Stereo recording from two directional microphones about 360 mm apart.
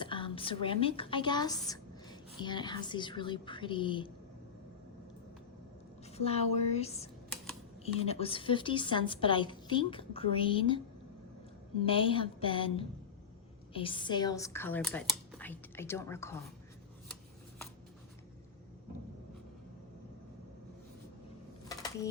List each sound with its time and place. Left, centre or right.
0.0 s a woman's voice: centre
6.1 s a woman's voice: centre
11.8 s a woman's voice: centre
21.7 s a sound: centre